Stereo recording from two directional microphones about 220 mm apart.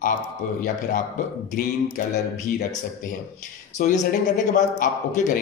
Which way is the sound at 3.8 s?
40° left (ahead or behind).